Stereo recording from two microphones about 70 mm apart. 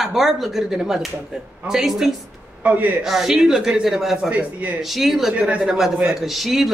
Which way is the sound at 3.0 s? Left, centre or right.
Centre.